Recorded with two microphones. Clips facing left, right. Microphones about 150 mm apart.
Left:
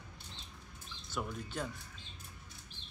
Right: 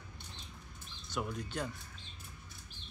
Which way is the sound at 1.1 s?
Centre (ahead or behind).